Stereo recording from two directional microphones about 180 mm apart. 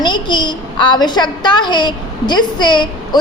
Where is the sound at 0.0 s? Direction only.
25° left (ahead or behind).